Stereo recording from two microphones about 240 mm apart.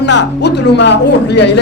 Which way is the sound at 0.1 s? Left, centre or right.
Left.